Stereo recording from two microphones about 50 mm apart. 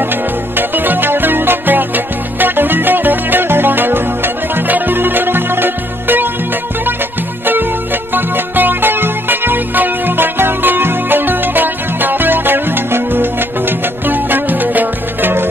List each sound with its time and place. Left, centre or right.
0.6 s music: right
8.1 s music: right